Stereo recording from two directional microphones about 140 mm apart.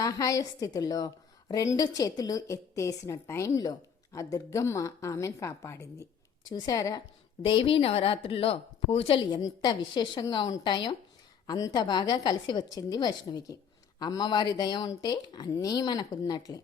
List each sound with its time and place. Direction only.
0.0 s a woman's voice: 25° left (ahead or behind)
7.4 s a woman's voice: 40° left (ahead or behind)